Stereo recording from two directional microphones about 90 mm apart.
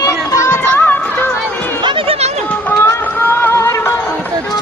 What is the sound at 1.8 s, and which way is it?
Chatter, 85° right.